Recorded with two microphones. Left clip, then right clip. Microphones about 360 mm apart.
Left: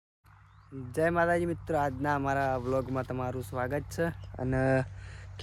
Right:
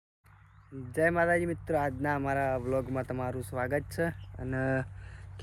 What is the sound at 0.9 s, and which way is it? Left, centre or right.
Speech, centre.